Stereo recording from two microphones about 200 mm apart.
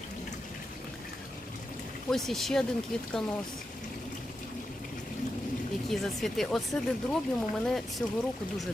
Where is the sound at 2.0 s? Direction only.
Centre (ahead or behind).